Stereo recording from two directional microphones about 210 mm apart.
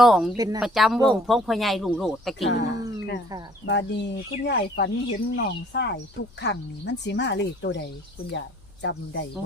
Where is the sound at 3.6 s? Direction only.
55° left (ahead or behind).